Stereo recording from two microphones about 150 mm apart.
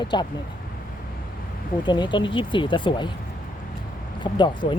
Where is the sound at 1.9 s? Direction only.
30° left (ahead or behind).